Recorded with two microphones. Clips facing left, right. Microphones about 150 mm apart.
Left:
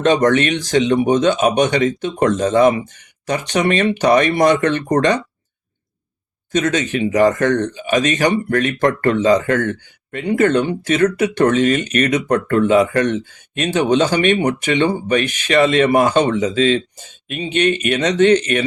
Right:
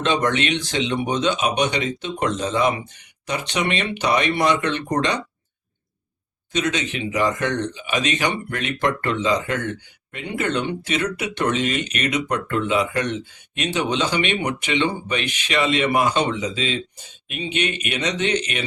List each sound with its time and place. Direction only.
0.0 s speech: 45° left (ahead or behind)
6.5 s speech: 45° left (ahead or behind)